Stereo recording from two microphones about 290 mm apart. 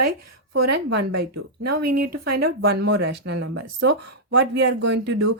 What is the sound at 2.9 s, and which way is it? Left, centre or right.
Speech, right.